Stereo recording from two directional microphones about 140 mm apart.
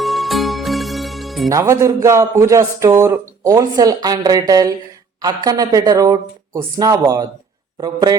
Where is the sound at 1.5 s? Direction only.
20° right (ahead or behind).